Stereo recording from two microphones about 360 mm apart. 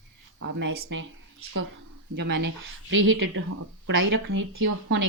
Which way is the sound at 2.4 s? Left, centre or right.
Right.